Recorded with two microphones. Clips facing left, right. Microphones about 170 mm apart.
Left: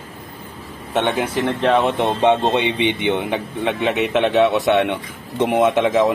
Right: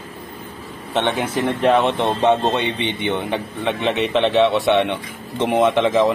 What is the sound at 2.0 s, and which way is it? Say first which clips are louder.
A man's voice: left 1 dB; 15° left (ahead or behind).